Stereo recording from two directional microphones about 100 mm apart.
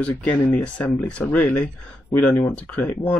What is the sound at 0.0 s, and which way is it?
Speech, 15° left (ahead or behind).